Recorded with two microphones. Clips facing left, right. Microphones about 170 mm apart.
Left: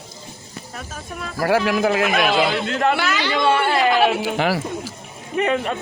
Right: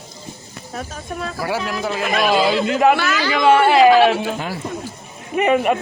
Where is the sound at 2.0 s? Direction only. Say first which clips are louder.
Right 1 dB; 5° left (ahead or behind); by 4.0 s 15° right (ahead or behind).